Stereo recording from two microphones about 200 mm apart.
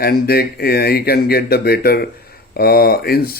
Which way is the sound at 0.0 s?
50° left (ahead or behind).